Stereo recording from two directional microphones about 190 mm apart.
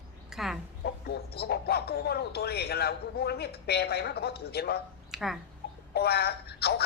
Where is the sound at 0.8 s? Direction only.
55° left (ahead or behind).